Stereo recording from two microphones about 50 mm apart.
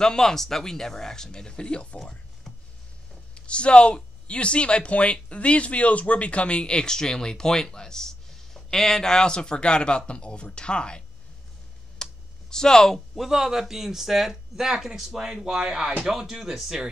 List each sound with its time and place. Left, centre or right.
0.0 s speech: centre
2.5 s a sound: centre
3.3 s speech: left
12.0 s computer keyboard: centre
13.1 s speech: centre